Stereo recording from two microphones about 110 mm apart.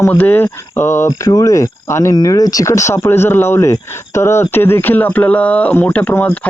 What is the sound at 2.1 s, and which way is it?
Speech, 35° left (ahead or behind).